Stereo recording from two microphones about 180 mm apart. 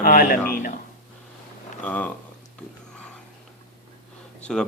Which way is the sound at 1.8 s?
10° left (ahead or behind).